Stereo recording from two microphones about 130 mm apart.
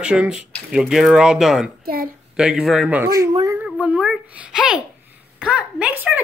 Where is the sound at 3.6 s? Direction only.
10° right (ahead or behind).